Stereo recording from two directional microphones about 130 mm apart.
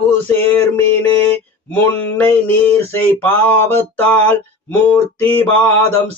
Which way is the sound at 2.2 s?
15° left (ahead or behind).